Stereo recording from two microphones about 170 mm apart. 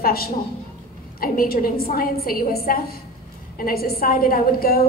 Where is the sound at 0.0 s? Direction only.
65° left (ahead or behind).